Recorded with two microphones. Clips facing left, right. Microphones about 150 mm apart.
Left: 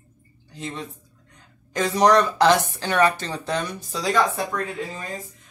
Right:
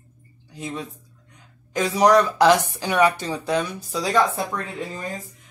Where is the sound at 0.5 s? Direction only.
10° right (ahead or behind).